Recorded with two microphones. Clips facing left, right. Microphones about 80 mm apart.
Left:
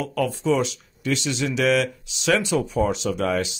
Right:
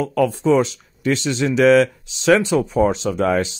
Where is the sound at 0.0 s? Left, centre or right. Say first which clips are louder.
Right 6 dB; right.